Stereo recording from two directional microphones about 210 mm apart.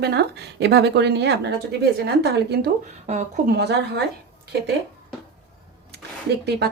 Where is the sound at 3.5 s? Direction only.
50° right (ahead or behind).